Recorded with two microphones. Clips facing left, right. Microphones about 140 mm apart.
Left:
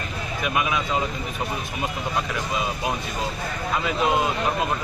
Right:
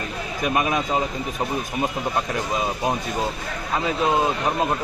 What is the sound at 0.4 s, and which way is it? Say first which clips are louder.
Speech: right 3 dB; 40° right (ahead or behind).